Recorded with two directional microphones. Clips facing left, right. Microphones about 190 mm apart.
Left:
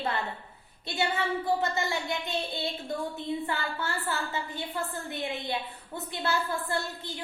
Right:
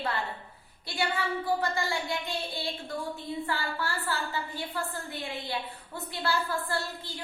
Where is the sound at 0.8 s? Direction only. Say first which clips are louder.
Left 1 dB; 20° left (ahead or behind).